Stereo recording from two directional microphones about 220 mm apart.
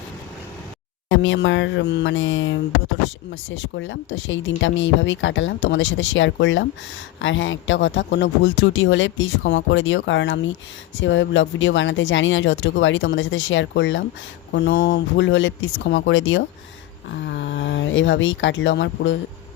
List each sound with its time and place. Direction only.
1.1 s speech: 60° left (ahead or behind)